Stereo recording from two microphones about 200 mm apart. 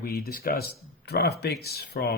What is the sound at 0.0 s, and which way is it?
Speech, 50° left (ahead or behind).